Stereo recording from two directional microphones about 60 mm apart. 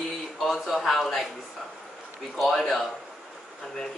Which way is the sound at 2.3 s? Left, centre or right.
Centre.